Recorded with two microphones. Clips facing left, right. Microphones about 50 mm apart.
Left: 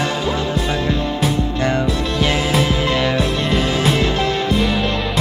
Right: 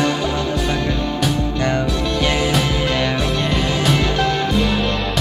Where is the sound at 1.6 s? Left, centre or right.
Centre.